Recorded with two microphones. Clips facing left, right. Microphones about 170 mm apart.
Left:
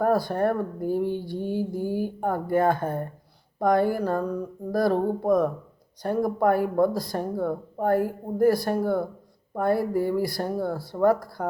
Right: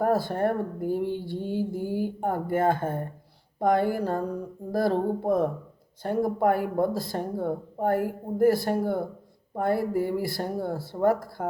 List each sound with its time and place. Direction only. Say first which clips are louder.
0.0 s speech: left 2 dB; 25° right (ahead or behind)